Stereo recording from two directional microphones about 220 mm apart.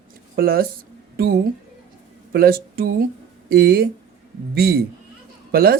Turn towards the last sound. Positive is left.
turn(degrees=-45)  # may be behind; listen again after turning